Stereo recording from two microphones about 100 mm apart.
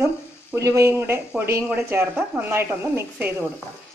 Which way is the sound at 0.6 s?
30° right (ahead or behind).